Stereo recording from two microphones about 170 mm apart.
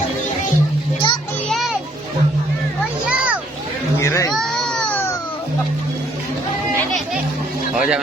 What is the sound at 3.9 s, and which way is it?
Children playing, 15° left (ahead or behind).